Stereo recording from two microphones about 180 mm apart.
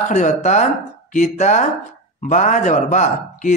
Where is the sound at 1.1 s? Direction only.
40° left (ahead or behind).